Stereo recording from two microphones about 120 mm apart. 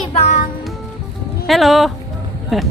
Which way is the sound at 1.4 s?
Centre (ahead or behind).